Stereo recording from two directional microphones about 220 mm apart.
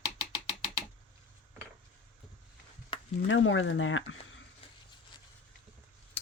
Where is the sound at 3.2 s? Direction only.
60° left (ahead or behind).